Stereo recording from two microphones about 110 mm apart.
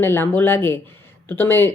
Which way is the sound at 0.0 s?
20° left (ahead or behind).